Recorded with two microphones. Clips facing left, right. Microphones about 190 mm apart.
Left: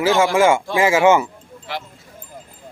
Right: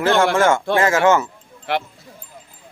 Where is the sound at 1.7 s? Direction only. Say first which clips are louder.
Right 7 dB; 60° right (ahead or behind).